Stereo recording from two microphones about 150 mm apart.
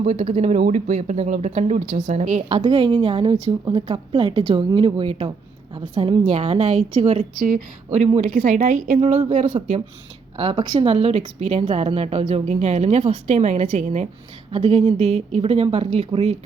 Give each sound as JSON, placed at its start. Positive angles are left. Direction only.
{"t": 0.0, "sound": "a woman's voice", "side_deg": -50}
{"t": 2.6, "sound": "a woman's voice", "side_deg": -35}
{"t": 10.3, "sound": "speech", "side_deg": -35}
{"t": 10.8, "sound": "a woman's voice", "side_deg": -40}